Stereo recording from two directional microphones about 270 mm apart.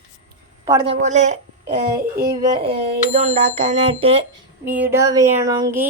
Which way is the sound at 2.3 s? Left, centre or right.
Centre.